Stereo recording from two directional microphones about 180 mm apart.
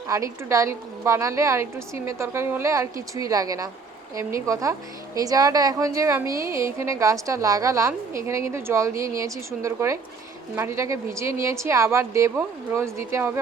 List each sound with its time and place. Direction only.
0.1 s a woman's voice: 15° right (ahead or behind)